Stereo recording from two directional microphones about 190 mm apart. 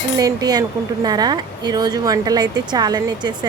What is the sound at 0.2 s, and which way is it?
A woman's voice, 20° right (ahead or behind).